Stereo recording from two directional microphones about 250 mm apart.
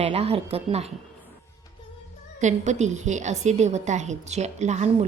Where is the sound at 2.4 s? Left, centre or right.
Right.